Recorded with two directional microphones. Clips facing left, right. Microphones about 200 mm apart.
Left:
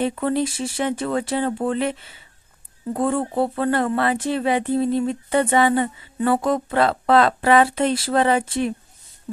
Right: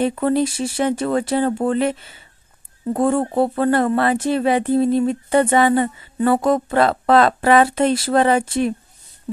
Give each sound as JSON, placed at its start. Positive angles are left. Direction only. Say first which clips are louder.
{"t": 0.0, "sound": "speech", "louder": "right 3 dB", "side_deg": -45}